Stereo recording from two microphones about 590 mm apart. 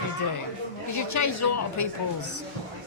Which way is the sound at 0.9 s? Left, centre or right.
Left.